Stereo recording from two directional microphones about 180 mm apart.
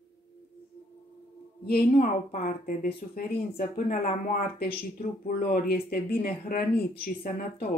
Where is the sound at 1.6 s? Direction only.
55° left (ahead or behind).